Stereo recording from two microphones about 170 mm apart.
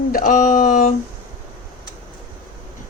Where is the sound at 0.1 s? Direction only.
55° left (ahead or behind).